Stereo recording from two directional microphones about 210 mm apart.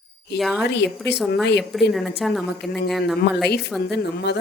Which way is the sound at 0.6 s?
55° left (ahead or behind).